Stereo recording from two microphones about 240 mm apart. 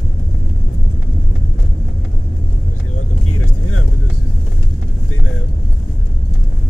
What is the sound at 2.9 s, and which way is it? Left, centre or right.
Vehicle, left.